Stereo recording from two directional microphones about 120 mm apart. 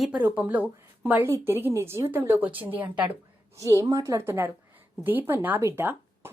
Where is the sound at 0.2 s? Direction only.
15° right (ahead or behind).